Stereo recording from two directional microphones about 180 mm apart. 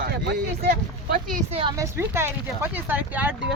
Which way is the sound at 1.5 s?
30° right (ahead or behind).